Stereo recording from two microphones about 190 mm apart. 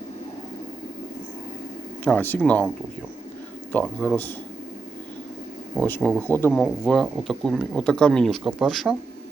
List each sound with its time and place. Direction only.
2.0 s speech: 10° left (ahead or behind)
3.7 s speech: 10° left (ahead or behind)
5.7 s speech: 5° left (ahead or behind)